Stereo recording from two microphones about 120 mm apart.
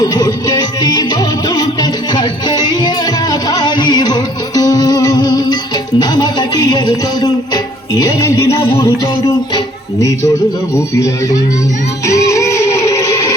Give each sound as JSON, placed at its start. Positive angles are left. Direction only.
{"t": 0.0, "sound": "music", "side_deg": 30}
{"t": 10.0, "sound": "a man's voice", "side_deg": 25}
{"t": 12.0, "sound": "music", "side_deg": 25}